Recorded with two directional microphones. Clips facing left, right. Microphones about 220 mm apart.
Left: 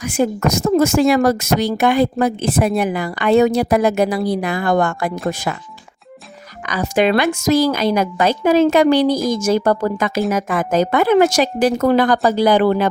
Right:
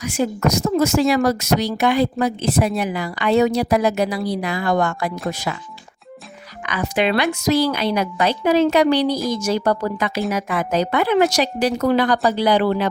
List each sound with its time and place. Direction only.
0.0 s speech: 50° left (ahead or behind)
6.6 s speech: 40° left (ahead or behind)